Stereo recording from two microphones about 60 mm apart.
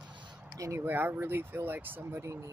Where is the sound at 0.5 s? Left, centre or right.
Right.